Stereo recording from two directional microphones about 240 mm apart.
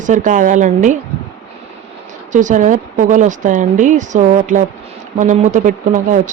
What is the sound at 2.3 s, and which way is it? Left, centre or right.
A woman's voice, right.